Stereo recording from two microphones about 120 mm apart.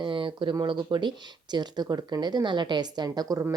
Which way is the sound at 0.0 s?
45° right (ahead or behind).